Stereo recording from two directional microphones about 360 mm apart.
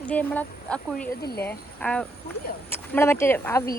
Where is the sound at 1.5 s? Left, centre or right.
Centre.